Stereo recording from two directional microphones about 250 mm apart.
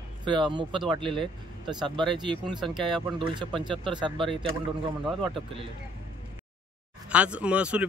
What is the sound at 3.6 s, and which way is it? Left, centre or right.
Speech, centre.